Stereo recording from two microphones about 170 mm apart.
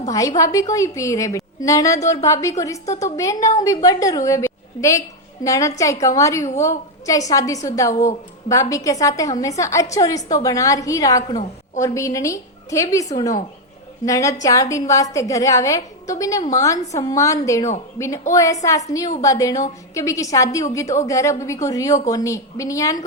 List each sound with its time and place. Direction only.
0.1 s a woman's voice: 20° left (ahead or behind)